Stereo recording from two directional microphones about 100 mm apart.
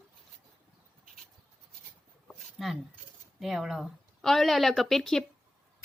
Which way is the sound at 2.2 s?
Centre (ahead or behind).